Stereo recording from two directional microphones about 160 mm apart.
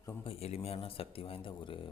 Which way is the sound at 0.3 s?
40° left (ahead or behind).